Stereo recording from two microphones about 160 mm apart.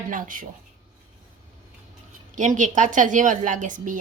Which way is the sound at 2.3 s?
50° right (ahead or behind).